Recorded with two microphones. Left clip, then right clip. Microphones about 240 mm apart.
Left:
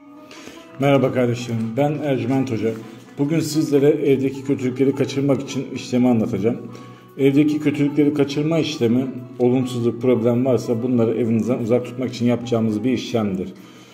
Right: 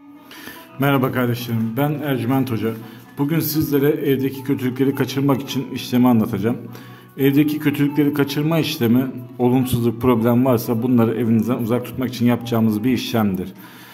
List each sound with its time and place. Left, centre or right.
0.8 s a man's voice: right